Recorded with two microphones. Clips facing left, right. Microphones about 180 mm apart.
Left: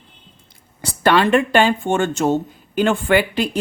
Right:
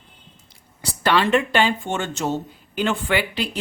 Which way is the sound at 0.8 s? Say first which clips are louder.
Left 4 dB; 50° left (ahead or behind).